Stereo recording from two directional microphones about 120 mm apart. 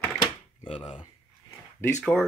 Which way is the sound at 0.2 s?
45° left (ahead or behind).